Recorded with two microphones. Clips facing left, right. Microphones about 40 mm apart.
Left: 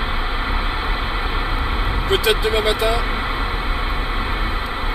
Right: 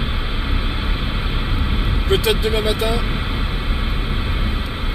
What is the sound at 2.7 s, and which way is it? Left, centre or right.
Speech, left.